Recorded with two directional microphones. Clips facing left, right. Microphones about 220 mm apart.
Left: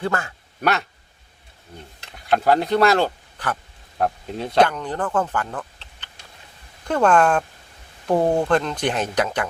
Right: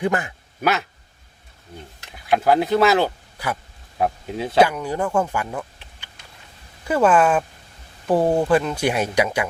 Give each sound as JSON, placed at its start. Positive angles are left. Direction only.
{"t": 0.0, "sound": "speech", "side_deg": -15}
{"t": 0.6, "sound": "speech", "side_deg": 0}
{"t": 2.1, "sound": "speech", "side_deg": 0}